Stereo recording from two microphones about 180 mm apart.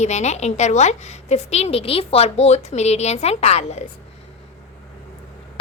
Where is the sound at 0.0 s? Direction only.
40° left (ahead or behind).